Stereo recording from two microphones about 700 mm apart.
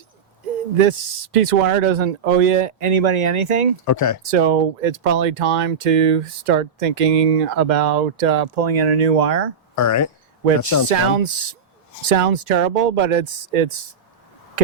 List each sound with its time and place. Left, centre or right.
0.8 s speech: right
3.8 s speech: left
4.3 s speech: right
9.7 s speech: left
11.2 s speech: right